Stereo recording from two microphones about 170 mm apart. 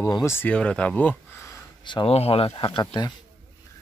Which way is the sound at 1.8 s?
30° left (ahead or behind).